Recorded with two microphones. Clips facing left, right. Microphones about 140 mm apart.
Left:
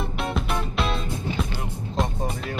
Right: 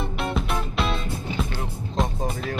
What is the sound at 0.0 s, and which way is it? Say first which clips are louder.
Music: right 1 dB; centre (ahead or behind).